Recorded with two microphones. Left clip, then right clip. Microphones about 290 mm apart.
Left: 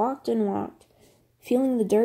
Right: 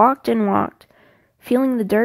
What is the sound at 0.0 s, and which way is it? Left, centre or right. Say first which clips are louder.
Speech: right 10 dB; right.